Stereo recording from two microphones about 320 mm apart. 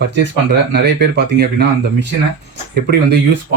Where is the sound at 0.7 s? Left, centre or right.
Right.